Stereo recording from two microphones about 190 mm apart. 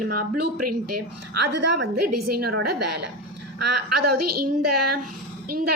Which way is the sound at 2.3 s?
55° right (ahead or behind).